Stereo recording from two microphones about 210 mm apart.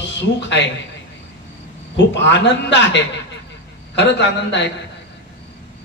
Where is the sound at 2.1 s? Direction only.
60° left (ahead or behind).